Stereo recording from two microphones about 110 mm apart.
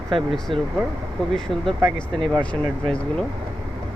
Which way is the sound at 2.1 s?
50° right (ahead or behind).